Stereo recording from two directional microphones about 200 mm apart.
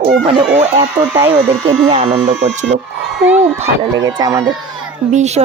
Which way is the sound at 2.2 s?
35° right (ahead or behind).